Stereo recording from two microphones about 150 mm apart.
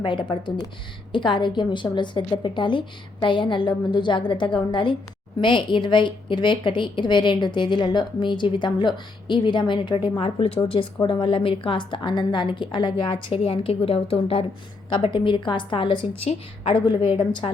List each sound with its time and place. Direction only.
0.0 s a woman's voice: 35° left (ahead or behind)